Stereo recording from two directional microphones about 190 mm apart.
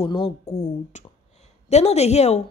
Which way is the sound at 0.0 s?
30° left (ahead or behind).